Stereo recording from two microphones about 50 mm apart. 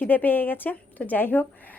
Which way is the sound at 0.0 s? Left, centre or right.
Left.